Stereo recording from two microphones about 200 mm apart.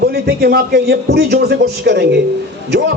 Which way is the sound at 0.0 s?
50° right (ahead or behind).